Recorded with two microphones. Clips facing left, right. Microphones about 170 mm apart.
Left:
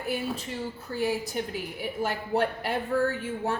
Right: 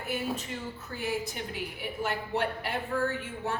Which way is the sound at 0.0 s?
35° left (ahead or behind).